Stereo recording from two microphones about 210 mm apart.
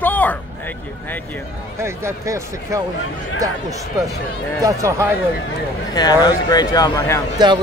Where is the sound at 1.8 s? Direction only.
10° right (ahead or behind).